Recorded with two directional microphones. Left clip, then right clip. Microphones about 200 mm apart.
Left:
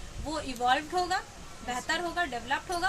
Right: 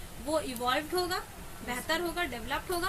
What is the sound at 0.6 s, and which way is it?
A woman's voice, 50° left (ahead or behind).